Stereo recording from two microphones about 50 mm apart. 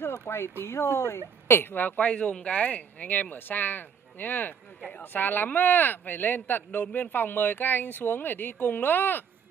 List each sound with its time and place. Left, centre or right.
0.3 s a woman's voice: left
2.5 s speech: left